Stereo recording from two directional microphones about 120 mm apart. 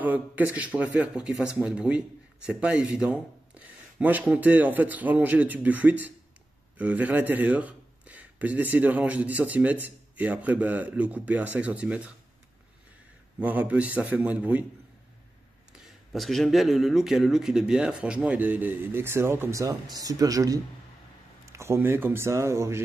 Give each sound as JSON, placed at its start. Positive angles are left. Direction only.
{"t": 0.0, "sound": "speech", "side_deg": -15}
{"t": 13.4, "sound": "speech", "side_deg": -10}
{"t": 15.8, "sound": "speech", "side_deg": 0}